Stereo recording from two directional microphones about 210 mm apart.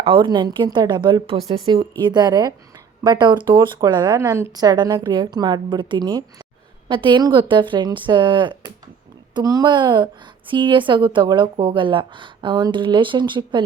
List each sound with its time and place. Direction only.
0.0 s speech: 25° right (ahead or behind)